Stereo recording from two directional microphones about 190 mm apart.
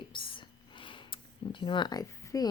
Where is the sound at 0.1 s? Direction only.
25° left (ahead or behind).